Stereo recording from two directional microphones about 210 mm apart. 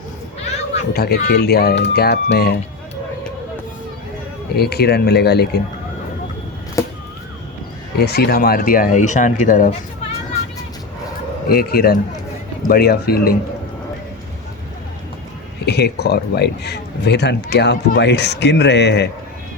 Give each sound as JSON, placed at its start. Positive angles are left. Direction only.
{"t": 0.8, "sound": "speech", "side_deg": 50}
{"t": 4.5, "sound": "speech", "side_deg": 50}
{"t": 6.8, "sound": "a sound", "side_deg": 15}
{"t": 7.9, "sound": "speech", "side_deg": 50}
{"t": 11.4, "sound": "speech", "side_deg": 45}
{"t": 15.6, "sound": "speech", "side_deg": 50}